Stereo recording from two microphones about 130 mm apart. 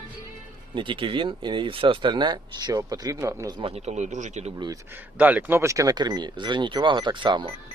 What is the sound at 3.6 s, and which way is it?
Speech, 50° right (ahead or behind).